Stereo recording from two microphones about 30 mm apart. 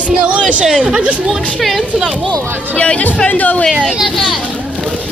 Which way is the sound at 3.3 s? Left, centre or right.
Left.